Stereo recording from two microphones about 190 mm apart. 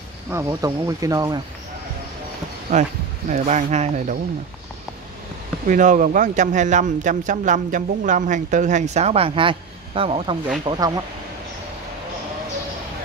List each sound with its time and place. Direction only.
0.3 s speech: 15° right (ahead or behind)
3.3 s speech: 40° right (ahead or behind)
5.7 s speech: 40° right (ahead or behind); by 10.9 s 25° right (ahead or behind)